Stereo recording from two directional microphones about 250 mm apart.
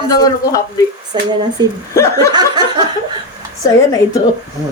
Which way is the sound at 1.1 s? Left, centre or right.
Centre.